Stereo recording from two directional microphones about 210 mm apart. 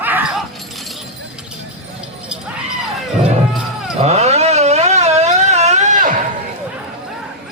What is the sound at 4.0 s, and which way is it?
Vehicle, 30° right (ahead or behind).